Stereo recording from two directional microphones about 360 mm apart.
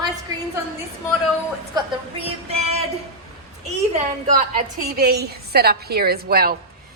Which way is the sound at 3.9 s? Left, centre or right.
Right.